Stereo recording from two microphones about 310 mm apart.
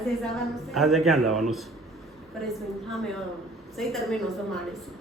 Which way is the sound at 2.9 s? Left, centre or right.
Centre.